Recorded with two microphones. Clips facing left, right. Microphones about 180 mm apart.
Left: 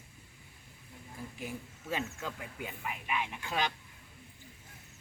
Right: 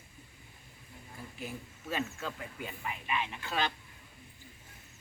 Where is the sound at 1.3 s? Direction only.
15° left (ahead or behind).